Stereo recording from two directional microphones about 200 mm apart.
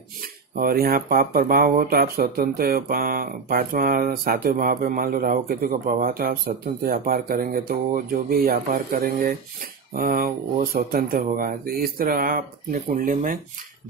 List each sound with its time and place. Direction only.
0.6 s speech: 50° right (ahead or behind)